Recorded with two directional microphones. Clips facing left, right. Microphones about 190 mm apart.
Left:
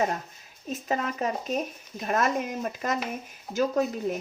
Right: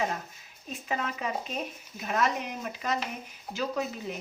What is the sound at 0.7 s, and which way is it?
Speech, 40° left (ahead or behind).